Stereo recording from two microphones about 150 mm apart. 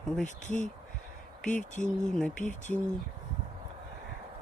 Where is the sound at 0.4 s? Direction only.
55° left (ahead or behind).